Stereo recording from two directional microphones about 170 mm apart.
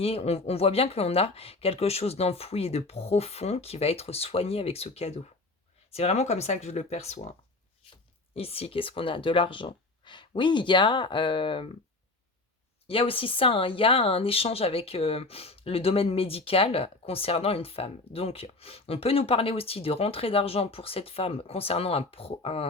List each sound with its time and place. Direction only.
0.0 s speech: 35° left (ahead or behind)
12.9 s speech: 30° left (ahead or behind)